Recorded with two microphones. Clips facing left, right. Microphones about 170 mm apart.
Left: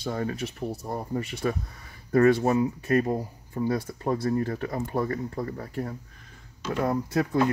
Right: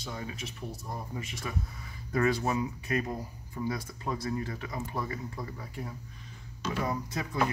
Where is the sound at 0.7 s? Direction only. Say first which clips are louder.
Left 8 dB; 65° left (ahead or behind).